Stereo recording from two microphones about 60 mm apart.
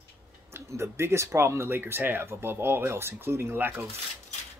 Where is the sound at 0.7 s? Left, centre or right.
Right.